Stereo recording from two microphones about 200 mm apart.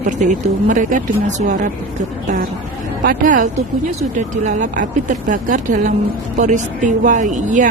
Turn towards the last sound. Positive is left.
turn(degrees=-40)  # may be behind; listen again after turning